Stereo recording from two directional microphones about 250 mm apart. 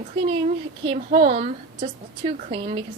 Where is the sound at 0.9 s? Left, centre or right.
Right.